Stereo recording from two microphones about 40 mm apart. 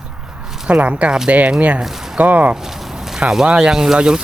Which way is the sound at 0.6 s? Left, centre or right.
Right.